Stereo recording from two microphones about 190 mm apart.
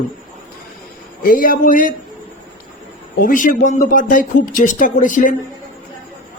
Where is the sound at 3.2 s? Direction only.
45° left (ahead or behind).